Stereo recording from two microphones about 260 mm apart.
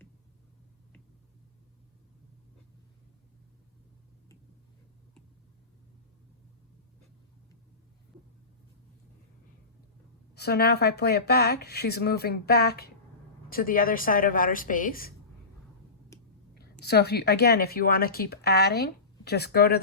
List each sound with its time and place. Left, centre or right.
10.3 s a woman's voice: left
16.1 s a sound: centre
16.8 s a woman's voice: left